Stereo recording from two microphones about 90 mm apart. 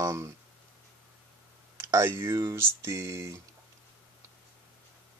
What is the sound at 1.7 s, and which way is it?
Speech, 30° right (ahead or behind).